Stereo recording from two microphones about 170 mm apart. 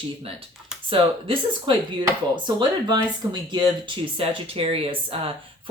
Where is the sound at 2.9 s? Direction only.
25° right (ahead or behind).